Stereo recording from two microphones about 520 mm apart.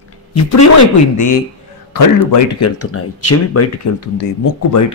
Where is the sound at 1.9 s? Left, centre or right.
Left.